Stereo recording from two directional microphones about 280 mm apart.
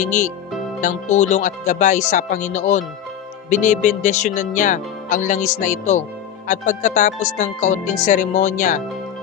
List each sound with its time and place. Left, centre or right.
0.0 s speech: left